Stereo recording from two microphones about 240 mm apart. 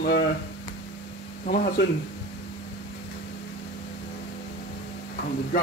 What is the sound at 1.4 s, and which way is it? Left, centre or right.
Speech, left.